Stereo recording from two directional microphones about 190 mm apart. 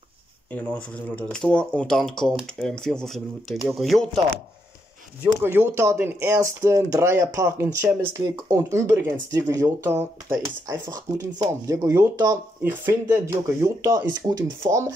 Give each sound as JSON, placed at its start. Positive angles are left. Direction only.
{"t": 0.5, "sound": "speech", "side_deg": 10}
{"t": 5.2, "sound": "speech", "side_deg": -10}